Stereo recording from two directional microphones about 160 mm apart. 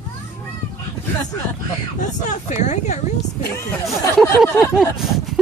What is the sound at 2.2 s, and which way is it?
Speech, 50° left (ahead or behind).